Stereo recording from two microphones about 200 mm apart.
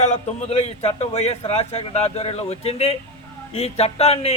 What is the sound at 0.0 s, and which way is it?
A man's voice, 35° left (ahead or behind).